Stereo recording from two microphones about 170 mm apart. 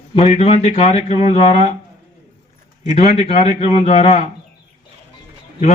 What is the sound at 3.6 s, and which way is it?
Speech, 40° left (ahead or behind).